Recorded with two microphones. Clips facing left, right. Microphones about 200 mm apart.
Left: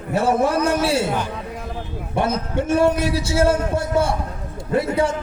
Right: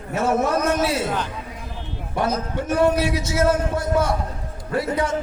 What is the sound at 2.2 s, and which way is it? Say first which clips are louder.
A man's voice: left 2 dB; 25° left (ahead or behind).